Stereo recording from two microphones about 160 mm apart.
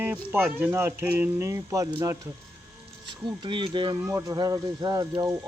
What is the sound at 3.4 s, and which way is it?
Speech, 30° right (ahead or behind).